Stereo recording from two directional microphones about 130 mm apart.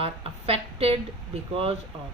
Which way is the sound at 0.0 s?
50° right (ahead or behind).